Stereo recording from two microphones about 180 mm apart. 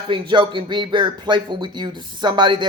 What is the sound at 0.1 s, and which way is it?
Speech, 25° right (ahead or behind).